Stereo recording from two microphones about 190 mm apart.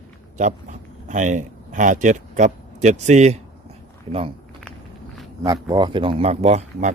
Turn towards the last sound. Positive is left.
turn(degrees=-35)  # may be behind; listen again after turning